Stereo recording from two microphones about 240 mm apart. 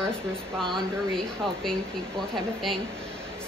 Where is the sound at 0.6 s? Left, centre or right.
Centre.